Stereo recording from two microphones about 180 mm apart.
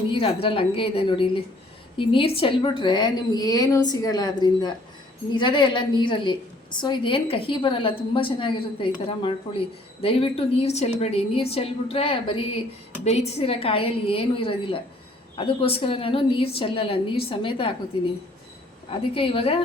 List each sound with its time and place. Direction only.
0.1 s a sound: 30° left (ahead or behind)
0.4 s a woman's voice: 30° left (ahead or behind)
18.9 s a woman's voice: 30° left (ahead or behind)